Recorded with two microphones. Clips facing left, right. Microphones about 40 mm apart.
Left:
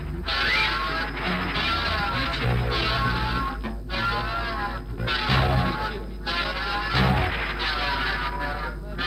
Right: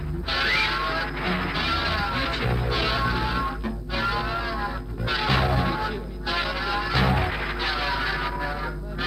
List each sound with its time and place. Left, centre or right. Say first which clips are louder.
0.3 s music: even; centre
1.5 s music: even; left
1.8 s music: even; centre
4.5 s music: even; left
5.6 s music: right 1 dB; centre
6.9 s music: left 1 dB; centre
7.6 s a sound: right 1 dB; centre
8.2 s music: even; centre